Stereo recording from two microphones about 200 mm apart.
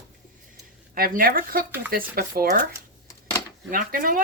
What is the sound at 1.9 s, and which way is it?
Speech, 45° right (ahead or behind).